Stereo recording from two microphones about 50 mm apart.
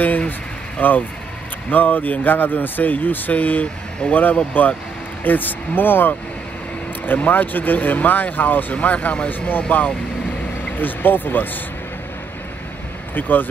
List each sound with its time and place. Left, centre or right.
0.0 s speech: left
13.1 s speech: left